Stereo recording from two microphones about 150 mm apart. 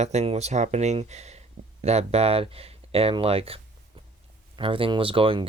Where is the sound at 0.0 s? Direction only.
50° right (ahead or behind).